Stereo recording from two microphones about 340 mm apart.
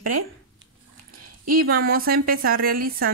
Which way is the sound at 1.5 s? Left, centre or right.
Right.